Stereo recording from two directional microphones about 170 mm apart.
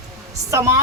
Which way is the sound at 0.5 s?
15° right (ahead or behind).